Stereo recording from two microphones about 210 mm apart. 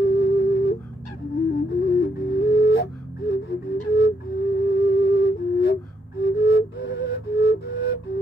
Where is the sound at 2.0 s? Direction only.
50° left (ahead or behind).